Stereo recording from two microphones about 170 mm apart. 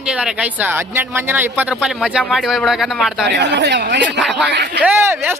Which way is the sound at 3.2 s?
90° right.